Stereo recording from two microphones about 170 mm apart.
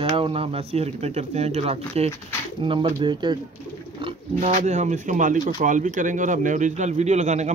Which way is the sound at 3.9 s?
30° right (ahead or behind).